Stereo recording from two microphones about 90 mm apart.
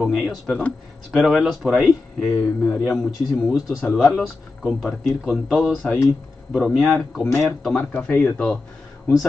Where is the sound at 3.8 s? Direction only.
5° left (ahead or behind).